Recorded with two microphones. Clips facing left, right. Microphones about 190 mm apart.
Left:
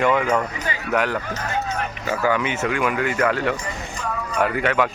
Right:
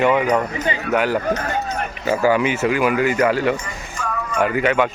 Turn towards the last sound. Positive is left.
turn(degrees=0)  # may be behind; listen again after turning